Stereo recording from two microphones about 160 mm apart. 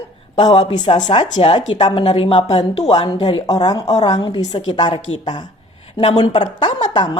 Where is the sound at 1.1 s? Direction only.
35° left (ahead or behind).